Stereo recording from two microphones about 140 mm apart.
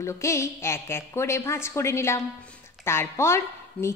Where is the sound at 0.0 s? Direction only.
20° left (ahead or behind).